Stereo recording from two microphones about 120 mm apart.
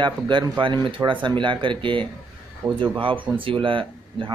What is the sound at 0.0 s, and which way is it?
Speech, 40° right (ahead or behind).